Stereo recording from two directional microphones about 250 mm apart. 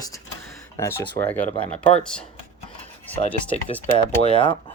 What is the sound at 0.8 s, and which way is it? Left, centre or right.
Speech, centre.